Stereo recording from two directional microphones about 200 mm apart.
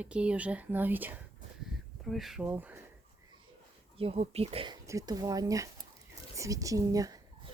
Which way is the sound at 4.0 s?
30° right (ahead or behind).